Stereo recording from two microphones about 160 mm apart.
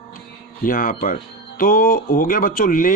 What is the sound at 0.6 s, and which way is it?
Speech, 60° left (ahead or behind).